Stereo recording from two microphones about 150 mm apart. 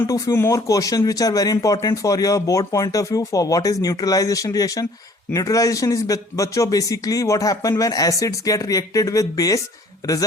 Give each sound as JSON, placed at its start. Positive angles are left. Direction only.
{"t": 0.0, "sound": "speech", "side_deg": 20}